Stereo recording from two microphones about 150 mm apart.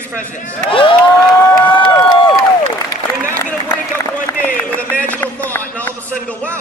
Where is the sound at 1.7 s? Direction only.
35° left (ahead or behind).